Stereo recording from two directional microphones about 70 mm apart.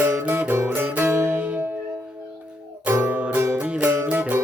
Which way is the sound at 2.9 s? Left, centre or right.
Right.